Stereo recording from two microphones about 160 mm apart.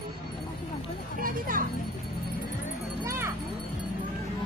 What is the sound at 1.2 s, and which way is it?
Music, 60° right (ahead or behind).